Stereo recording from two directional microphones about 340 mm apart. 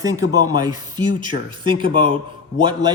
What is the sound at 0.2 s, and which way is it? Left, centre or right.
Speech, left.